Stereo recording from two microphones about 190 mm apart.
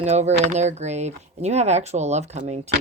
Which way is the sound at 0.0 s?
35° right (ahead or behind).